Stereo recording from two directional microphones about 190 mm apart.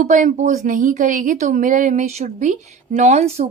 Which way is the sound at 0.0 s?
40° right (ahead or behind).